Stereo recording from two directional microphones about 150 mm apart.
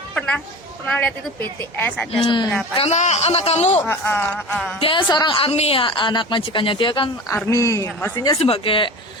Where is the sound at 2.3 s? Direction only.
30° left (ahead or behind).